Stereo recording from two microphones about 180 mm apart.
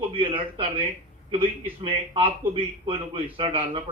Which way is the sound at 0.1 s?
30° right (ahead or behind).